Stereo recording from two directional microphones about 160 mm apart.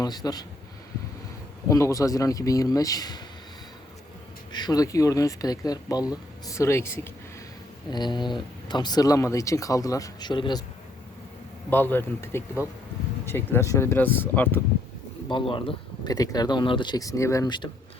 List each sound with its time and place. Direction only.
0.0 s speech: 25° left (ahead or behind)
1.7 s speech: 20° left (ahead or behind)
4.5 s speech: 25° left (ahead or behind)
7.9 s speech: 25° left (ahead or behind)
11.7 s speech: 15° left (ahead or behind)
15.3 s speech: 30° left (ahead or behind)